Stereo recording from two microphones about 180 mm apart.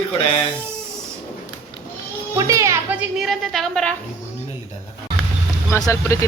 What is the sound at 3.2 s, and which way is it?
Speech, centre (ahead or behind).